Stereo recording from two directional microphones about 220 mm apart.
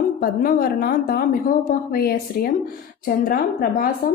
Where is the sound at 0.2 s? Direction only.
40° left (ahead or behind).